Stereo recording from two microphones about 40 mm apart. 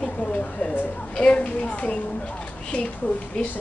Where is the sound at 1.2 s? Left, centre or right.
Left.